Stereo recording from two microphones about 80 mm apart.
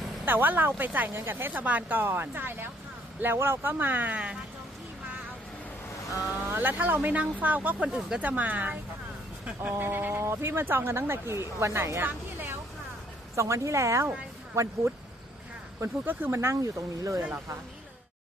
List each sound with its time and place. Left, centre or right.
0.2 s speech: right
6.5 s speech: right
13.4 s speech: right
15.8 s speech: right